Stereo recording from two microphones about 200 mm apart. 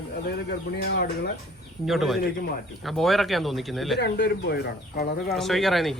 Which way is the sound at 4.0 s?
55° left (ahead or behind).